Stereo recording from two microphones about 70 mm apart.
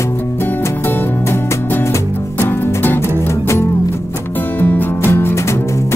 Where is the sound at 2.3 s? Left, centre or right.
Left.